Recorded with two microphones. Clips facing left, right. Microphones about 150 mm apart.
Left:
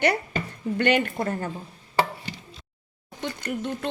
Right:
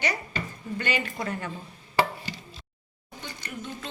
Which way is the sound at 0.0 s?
60° left (ahead or behind).